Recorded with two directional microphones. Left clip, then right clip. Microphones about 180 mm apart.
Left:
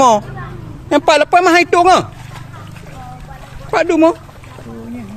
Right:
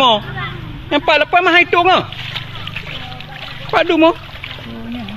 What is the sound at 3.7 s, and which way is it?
Speech, 30° left (ahead or behind).